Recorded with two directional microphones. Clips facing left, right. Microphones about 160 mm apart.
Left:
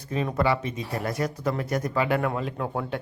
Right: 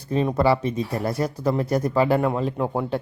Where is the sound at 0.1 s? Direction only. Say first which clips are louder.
Right 5 dB; 30° right (ahead or behind).